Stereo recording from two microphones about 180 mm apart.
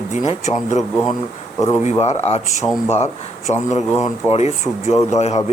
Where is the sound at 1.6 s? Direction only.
15° left (ahead or behind).